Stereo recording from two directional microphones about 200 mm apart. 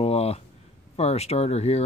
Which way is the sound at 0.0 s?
30° left (ahead or behind).